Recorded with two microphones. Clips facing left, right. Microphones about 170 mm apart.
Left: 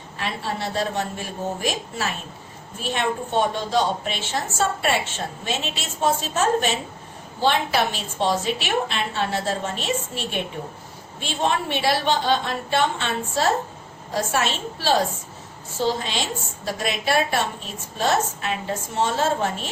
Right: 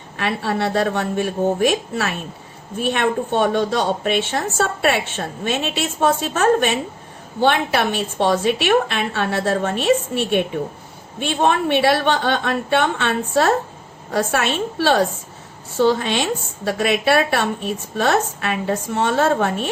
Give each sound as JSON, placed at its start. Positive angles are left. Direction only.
{"t": 0.2, "sound": "a woman's voice", "side_deg": -65}